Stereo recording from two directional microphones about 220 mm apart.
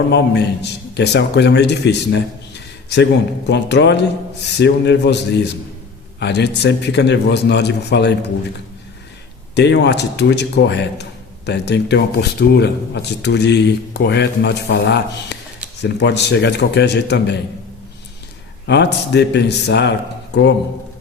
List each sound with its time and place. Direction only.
0.1 s a man's voice: 50° left (ahead or behind)
9.6 s a man's voice: 50° left (ahead or behind)
18.6 s a man's voice: 50° left (ahead or behind)